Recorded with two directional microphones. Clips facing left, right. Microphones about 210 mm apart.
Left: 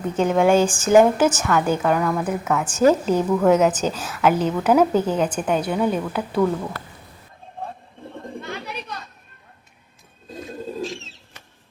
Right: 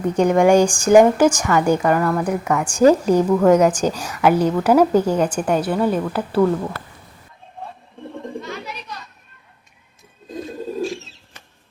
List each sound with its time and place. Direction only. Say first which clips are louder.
0.2 s a woman's voice: right 3 dB; 15° right (ahead or behind); by 2.6 s 5° left (ahead or behind)
2.6 s a woman's voice: right 4 dB; 10° right (ahead or behind)
8.4 s bird: right 1 dB; 55° left (ahead or behind)